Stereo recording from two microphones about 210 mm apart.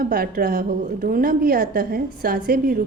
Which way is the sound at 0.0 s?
45° right (ahead or behind).